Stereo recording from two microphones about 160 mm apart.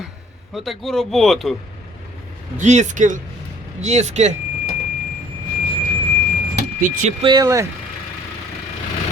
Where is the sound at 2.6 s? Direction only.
50° right (ahead or behind).